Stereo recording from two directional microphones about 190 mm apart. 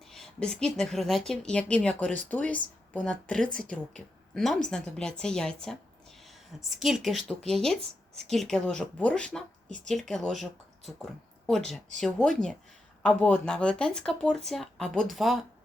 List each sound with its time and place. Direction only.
0.1 s a woman's voice: 5° left (ahead or behind)